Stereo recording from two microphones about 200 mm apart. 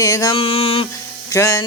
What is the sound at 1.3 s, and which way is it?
Music, 15° left (ahead or behind).